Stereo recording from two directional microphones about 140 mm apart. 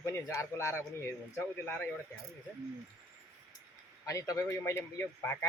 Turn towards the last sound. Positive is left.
turn(degrees=15)  # may be behind; listen again after turning